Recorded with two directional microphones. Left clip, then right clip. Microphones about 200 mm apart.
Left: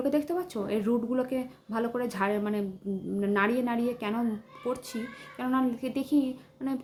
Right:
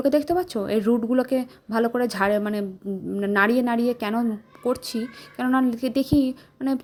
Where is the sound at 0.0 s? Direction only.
40° right (ahead or behind).